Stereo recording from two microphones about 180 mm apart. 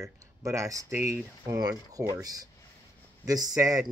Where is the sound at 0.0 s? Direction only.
15° right (ahead or behind).